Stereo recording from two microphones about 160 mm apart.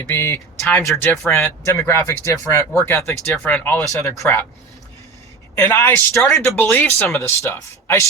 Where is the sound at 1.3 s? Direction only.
15° left (ahead or behind).